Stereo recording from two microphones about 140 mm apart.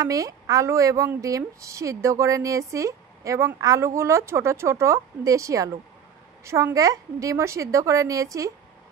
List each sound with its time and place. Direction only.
0.0 s a woman's voice: 25° right (ahead or behind)